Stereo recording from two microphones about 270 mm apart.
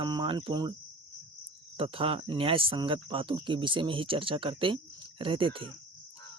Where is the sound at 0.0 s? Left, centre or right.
Centre.